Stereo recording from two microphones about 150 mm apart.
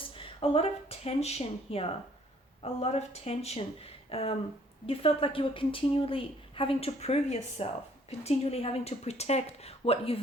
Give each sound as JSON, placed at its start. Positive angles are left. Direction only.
{"t": 0.2, "sound": "a woman's voice", "side_deg": 40}